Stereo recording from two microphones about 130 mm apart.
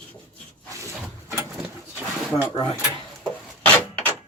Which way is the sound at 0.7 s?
25° right (ahead or behind).